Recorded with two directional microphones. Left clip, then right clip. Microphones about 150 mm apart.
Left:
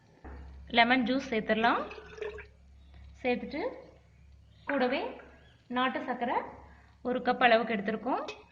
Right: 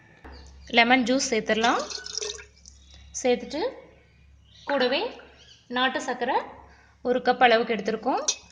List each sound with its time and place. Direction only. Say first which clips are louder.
0.7 s a woman's voice: right 6 dB; 40° right (ahead or behind)
3.2 s a woman's voice: right 7 dB; 60° right (ahead or behind)
4.8 s a woman's voice: right 5 dB; 60° right (ahead or behind)
7.0 s a woman's voice: right 6 dB; 45° right (ahead or behind)